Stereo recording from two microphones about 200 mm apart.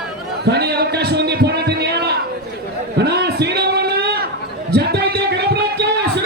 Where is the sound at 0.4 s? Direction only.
55° right (ahead or behind).